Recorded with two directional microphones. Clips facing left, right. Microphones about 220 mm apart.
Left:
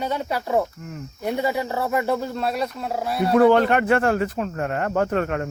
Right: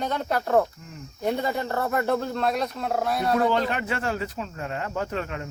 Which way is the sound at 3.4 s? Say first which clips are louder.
Left 8 dB; 60° left (ahead or behind).